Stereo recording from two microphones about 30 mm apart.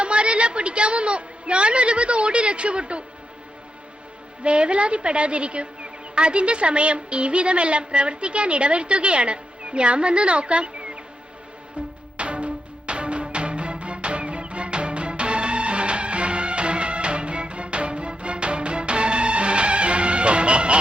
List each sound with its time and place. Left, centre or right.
0.0 s a woman's voice: right
4.4 s a woman's voice: right
12.1 s music: right